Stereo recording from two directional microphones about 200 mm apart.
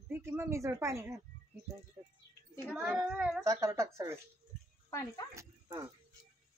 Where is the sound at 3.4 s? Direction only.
15° right (ahead or behind).